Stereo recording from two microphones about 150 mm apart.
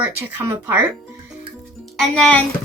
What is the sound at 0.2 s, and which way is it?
Speech, 15° right (ahead or behind).